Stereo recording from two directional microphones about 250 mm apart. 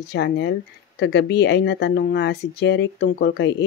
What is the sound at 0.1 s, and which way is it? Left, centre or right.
Speech, left.